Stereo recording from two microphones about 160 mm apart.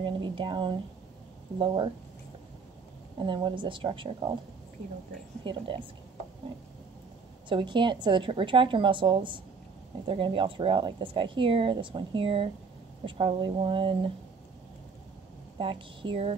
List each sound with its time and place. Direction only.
0.0 s a sound: 30° right (ahead or behind)
1.6 s speech: 30° right (ahead or behind)
3.2 s speech: 30° right (ahead or behind)
5.4 s speech: 30° right (ahead or behind)
7.4 s speech: 30° right (ahead or behind)
15.6 s speech: 30° right (ahead or behind)